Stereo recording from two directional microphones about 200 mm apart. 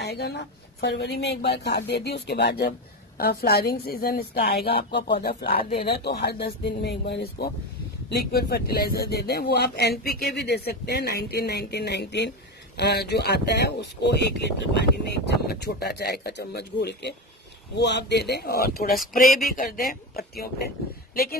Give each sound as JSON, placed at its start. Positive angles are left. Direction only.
{"t": 0.0, "sound": "speech", "side_deg": 55}